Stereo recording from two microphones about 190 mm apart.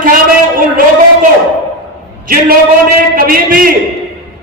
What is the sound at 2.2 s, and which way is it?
A man's voice, 50° right (ahead or behind).